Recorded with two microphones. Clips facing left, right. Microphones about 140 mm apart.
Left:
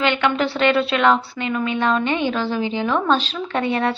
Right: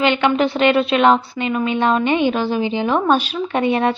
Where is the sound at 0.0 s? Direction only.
20° right (ahead or behind).